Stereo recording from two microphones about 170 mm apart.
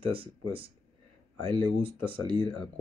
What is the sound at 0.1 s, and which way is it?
Speech, 35° right (ahead or behind).